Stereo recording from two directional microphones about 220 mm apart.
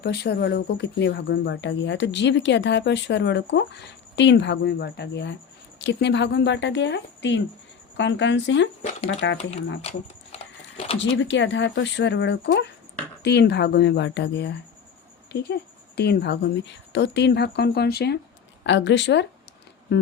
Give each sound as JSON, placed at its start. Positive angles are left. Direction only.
{"t": 0.0, "sound": "speech", "side_deg": 50}
{"t": 8.8, "sound": "speech", "side_deg": 30}
{"t": 9.0, "sound": "speech", "side_deg": 55}
{"t": 9.4, "sound": "speech", "side_deg": 30}
{"t": 10.3, "sound": "a sound", "side_deg": 25}
{"t": 11.2, "sound": "speech", "side_deg": 55}
{"t": 19.9, "sound": "music", "side_deg": 50}